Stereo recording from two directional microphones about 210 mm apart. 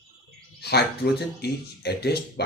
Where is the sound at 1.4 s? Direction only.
50° left (ahead or behind).